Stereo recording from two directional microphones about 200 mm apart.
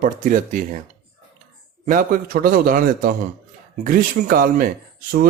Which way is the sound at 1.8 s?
45° right (ahead or behind).